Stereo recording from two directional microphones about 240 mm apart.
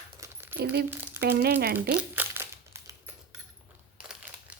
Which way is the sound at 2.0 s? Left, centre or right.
Centre.